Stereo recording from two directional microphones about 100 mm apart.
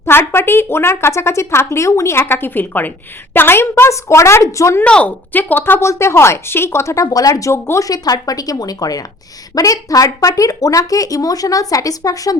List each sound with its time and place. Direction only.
0.0 s speech: 25° left (ahead or behind)
4.8 s speech: 10° left (ahead or behind); by 12.4 s 35° left (ahead or behind)